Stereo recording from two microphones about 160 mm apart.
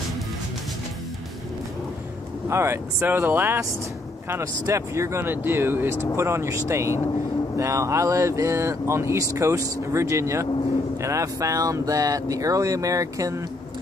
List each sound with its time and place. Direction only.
2.5 s speech: 15° right (ahead or behind)